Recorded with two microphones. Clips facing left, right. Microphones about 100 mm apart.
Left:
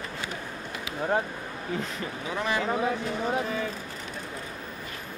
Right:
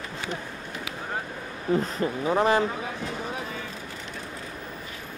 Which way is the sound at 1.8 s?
40° right (ahead or behind).